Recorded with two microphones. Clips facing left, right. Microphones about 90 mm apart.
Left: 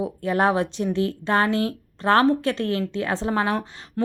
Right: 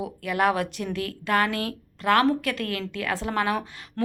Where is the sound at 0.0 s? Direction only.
30° left (ahead or behind).